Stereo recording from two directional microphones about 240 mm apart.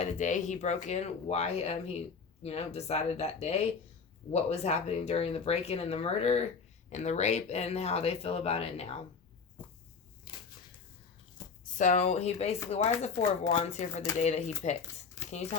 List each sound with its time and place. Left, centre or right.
0.0 s speech: left
9.6 s a sound: centre
11.8 s speech: left